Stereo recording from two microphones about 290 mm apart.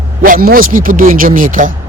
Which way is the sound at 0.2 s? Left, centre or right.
Right.